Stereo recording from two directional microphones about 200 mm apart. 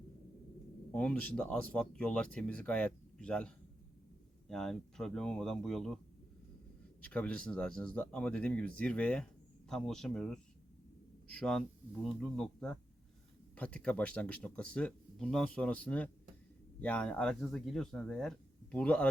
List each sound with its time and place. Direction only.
0.9 s speech: 5° left (ahead or behind)
7.0 s speech: 5° left (ahead or behind)